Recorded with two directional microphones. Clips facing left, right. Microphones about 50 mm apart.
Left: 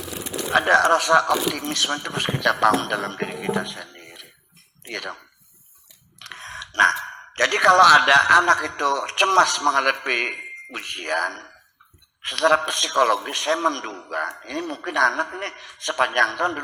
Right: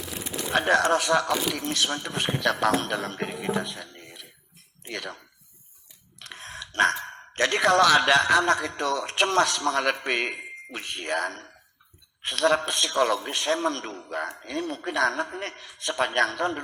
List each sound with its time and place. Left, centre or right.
0.5 s speech: left
6.3 s a man's voice: left